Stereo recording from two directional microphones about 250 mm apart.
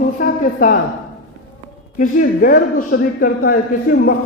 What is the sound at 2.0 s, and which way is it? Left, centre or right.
A man's voice, left.